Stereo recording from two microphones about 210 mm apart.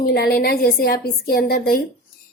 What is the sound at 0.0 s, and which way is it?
A woman's voice, 50° left (ahead or behind).